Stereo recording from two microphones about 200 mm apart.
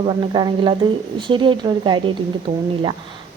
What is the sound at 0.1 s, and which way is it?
A woman's voice, 20° right (ahead or behind).